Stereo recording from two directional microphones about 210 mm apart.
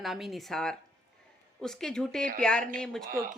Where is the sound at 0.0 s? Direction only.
Centre (ahead or behind).